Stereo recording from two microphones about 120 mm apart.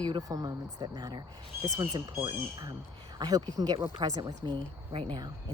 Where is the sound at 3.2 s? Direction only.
30° right (ahead or behind).